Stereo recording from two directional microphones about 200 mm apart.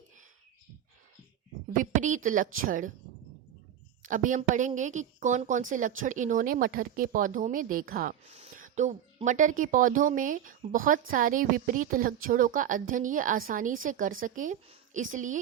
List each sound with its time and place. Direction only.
1.7 s a woman's voice: 40° right (ahead or behind)
4.0 s a woman's voice: 40° right (ahead or behind)